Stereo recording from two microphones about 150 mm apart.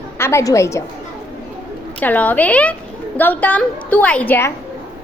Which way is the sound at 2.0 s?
10° left (ahead or behind).